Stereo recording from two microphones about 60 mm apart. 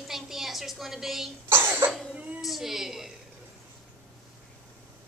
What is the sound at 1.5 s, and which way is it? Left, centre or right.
Cough, right.